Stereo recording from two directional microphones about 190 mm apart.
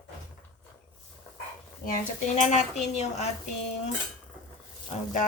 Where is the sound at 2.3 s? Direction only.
35° left (ahead or behind).